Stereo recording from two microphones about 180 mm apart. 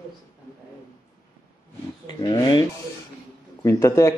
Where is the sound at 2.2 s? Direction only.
25° left (ahead or behind).